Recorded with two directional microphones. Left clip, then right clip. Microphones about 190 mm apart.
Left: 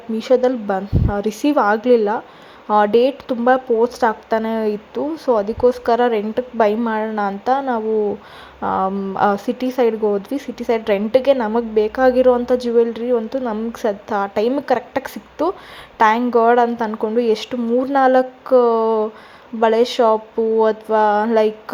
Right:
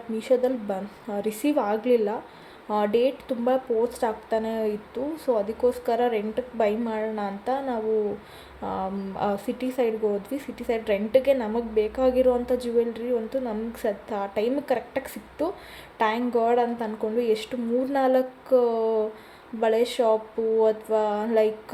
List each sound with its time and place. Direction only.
0.2 s speech: 25° left (ahead or behind)